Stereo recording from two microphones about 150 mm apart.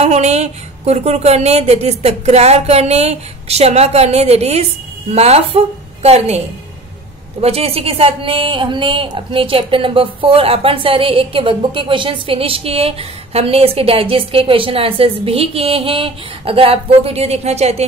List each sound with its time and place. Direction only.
0.0 s a woman's voice: 45° right (ahead or behind)
7.4 s a woman's voice: 40° right (ahead or behind)